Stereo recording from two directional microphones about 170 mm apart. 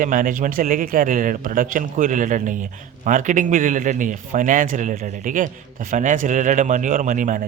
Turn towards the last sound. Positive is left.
turn(degrees=-50)  # may be behind; listen again after turning